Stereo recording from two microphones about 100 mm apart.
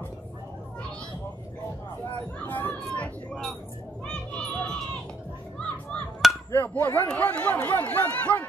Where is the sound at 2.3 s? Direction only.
15° left (ahead or behind).